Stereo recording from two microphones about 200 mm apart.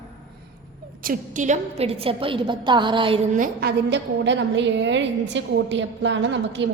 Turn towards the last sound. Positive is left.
turn(degrees=-65)  # may be behind; listen again after turning